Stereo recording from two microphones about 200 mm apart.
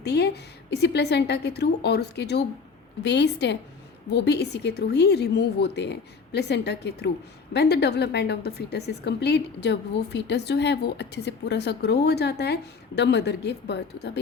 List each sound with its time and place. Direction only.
0.0 s a woman's voice: 55° left (ahead or behind)